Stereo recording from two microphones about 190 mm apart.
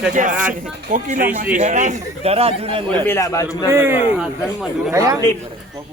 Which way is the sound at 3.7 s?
10° right (ahead or behind).